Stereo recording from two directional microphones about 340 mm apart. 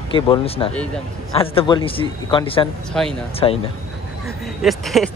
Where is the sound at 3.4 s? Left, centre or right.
Centre.